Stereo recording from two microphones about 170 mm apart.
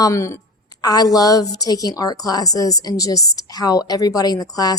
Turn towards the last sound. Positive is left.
turn(degrees=20)  # may be behind; listen again after turning